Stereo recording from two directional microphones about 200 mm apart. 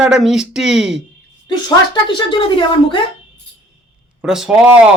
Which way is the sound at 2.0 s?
25° left (ahead or behind).